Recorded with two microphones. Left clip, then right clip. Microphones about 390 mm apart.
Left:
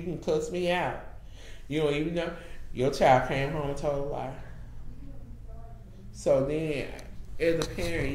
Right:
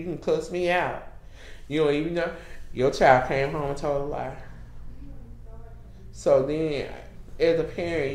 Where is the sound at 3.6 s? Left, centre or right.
Centre.